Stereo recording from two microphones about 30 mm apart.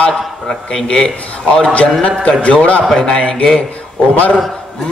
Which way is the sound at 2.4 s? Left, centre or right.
Left.